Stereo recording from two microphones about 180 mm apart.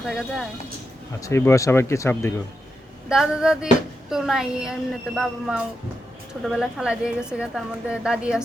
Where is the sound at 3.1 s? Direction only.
5° right (ahead or behind).